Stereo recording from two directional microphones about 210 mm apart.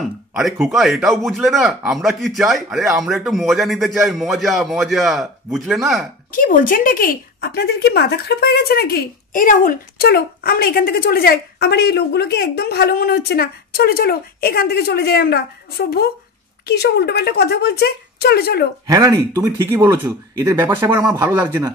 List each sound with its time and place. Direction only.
0.0 s a man's voice: centre (ahead or behind)
6.3 s speech: 40° left (ahead or behind)
18.9 s speech: 15° right (ahead or behind)